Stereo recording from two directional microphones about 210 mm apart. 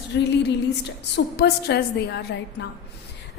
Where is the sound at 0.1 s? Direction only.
55° left (ahead or behind).